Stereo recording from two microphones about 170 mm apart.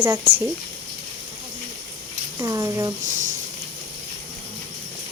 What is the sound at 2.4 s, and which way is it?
Speech, 20° right (ahead or behind).